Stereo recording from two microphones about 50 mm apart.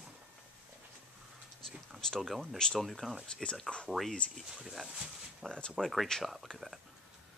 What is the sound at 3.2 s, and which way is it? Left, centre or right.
Speech, centre.